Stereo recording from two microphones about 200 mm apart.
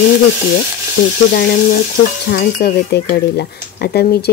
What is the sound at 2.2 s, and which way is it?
Speech, 55° left (ahead or behind).